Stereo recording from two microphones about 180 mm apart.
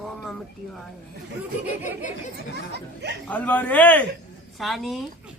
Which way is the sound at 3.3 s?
10° left (ahead or behind).